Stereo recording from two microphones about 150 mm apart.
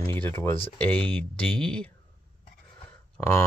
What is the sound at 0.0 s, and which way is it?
Speech, 15° left (ahead or behind).